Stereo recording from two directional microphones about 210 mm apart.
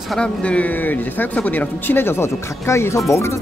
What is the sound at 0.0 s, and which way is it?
Speech, 5° left (ahead or behind).